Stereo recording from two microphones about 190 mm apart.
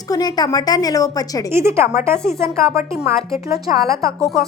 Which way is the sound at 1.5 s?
15° right (ahead or behind).